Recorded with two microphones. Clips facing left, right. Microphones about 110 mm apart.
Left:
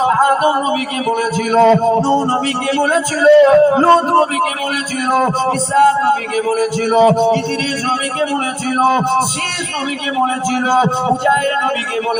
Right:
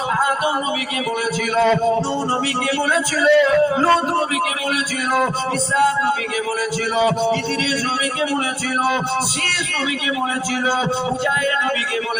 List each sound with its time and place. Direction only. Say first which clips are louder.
0.0 s a sound: left 7 dB; 45° left (ahead or behind)
1.5 s a man's voice: left 6 dB; 40° left (ahead or behind)
8.8 s a man's voice: left 8 dB; 45° left (ahead or behind)